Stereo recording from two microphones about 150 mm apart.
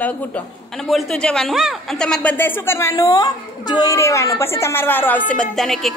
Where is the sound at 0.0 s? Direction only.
10° left (ahead or behind).